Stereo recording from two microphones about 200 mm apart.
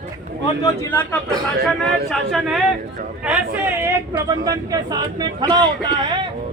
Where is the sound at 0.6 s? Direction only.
10° left (ahead or behind).